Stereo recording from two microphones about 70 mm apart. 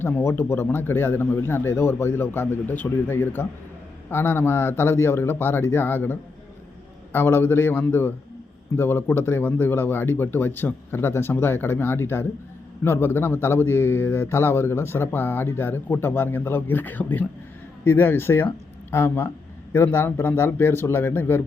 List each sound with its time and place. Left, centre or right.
0.0 s a man's voice: left